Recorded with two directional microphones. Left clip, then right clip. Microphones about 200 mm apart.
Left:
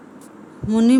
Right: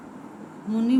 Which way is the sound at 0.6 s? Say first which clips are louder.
Left 7 dB; 45° left (ahead or behind).